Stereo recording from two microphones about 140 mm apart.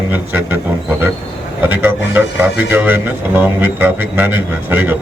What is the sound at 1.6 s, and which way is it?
Speech, 15° right (ahead or behind).